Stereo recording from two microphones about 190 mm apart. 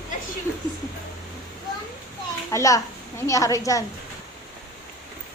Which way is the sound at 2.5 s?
15° left (ahead or behind).